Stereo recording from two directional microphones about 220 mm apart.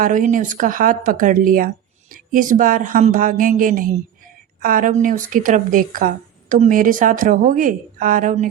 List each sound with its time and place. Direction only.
0.0 s speech: 35° right (ahead or behind)